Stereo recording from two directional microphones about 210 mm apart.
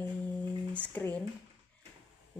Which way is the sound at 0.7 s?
5° left (ahead or behind).